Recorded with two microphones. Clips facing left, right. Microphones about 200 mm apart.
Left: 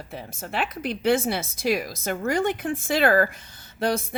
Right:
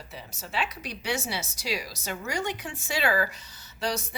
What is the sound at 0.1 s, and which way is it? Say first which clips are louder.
A woman's voice: left 4 dB; 55° left (ahead or behind).